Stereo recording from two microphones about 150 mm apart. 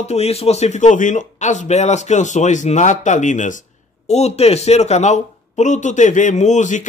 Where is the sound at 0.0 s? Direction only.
45° left (ahead or behind).